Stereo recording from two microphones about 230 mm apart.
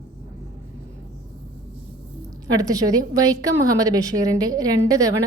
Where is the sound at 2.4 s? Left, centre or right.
Centre.